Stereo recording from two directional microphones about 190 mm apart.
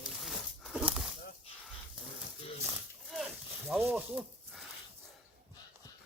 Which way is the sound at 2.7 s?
Centre (ahead or behind).